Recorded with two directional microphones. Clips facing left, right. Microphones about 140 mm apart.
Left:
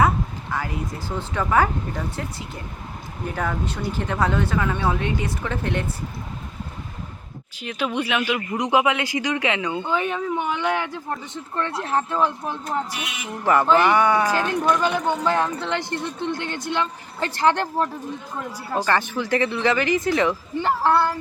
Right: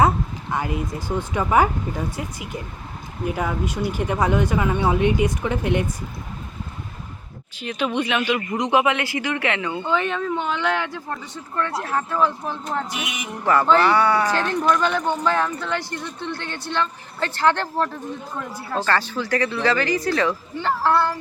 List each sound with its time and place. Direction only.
0.5 s speech: 20° right (ahead or behind)
7.6 s speech: 10° left (ahead or behind)